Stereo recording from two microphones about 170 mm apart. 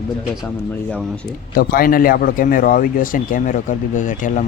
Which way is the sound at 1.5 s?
60° left (ahead or behind).